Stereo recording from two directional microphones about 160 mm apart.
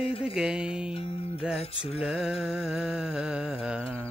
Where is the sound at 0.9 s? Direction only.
35° left (ahead or behind).